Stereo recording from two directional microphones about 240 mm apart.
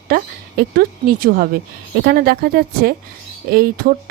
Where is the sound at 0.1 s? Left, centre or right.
Right.